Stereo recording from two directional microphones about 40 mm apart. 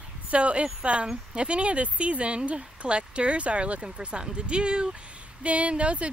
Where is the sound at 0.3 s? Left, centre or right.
Right.